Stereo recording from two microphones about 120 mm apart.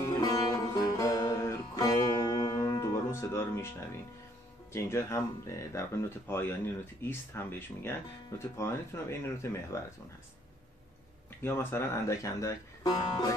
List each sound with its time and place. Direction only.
0.1 s music: 30° left (ahead or behind)
4.7 s speech: 25° left (ahead or behind)
11.4 s speech: 20° left (ahead or behind)